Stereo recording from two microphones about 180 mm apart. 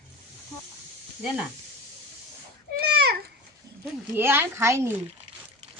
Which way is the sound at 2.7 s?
60° right (ahead or behind).